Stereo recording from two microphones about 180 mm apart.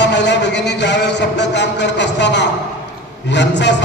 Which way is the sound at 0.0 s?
75° left (ahead or behind).